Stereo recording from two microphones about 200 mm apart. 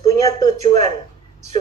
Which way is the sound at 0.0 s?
20° left (ahead or behind).